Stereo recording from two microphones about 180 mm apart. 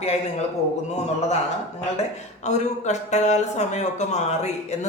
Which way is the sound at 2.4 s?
40° left (ahead or behind).